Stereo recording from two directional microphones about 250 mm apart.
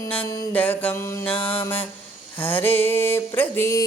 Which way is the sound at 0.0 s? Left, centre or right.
Centre.